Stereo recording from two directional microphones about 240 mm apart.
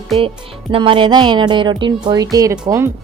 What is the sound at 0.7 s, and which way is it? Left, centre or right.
A woman's voice, right.